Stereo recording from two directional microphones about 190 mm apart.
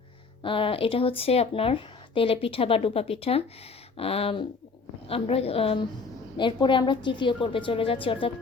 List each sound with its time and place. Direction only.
0.4 s speech: 25° left (ahead or behind)